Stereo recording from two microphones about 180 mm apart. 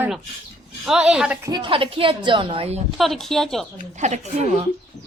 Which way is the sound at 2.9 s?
Centre (ahead or behind).